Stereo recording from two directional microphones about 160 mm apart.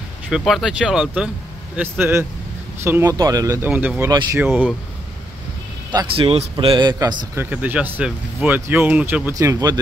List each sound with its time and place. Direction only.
0.5 s a man's voice: 5° right (ahead or behind); by 3.7 s 20° right (ahead or behind)
3.7 s speech: 10° right (ahead or behind)
4.1 s a man's voice: 25° right (ahead or behind)
5.9 s a man's voice: 35° right (ahead or behind)
7.3 s speech: 10° right (ahead or behind)